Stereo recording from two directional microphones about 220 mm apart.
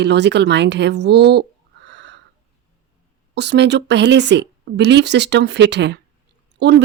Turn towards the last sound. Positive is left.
turn(degrees=-50)  # may be behind; listen again after turning